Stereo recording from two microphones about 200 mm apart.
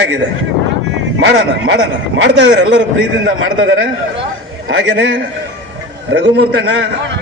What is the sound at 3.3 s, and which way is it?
Speech, 80° right.